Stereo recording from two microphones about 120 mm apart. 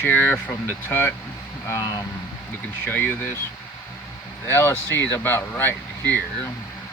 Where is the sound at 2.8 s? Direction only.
15° left (ahead or behind).